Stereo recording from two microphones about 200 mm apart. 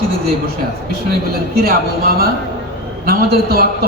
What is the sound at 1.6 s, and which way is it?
A man's voice, 50° right (ahead or behind).